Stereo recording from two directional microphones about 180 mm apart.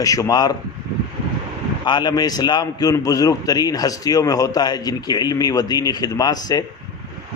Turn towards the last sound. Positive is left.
turn(degrees=20)  # may be behind; listen again after turning